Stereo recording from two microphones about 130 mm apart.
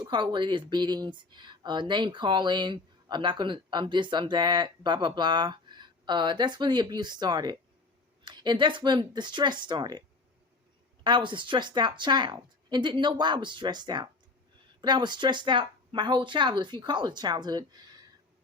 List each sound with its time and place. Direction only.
0.1 s speech: 35° right (ahead or behind)
11.0 s speech: 35° right (ahead or behind)